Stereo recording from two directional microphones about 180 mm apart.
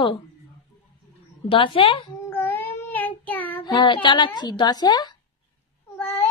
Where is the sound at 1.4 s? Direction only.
30° left (ahead or behind).